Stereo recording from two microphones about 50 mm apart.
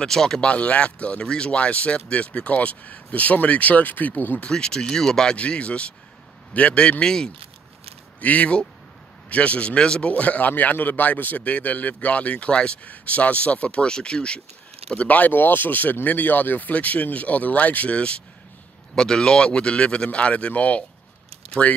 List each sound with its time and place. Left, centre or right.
0.0 s speech: centre
0.5 s speech: left
4.4 s speech: centre
5.4 s speech: left
8.2 s speech: left
14.9 s speech: left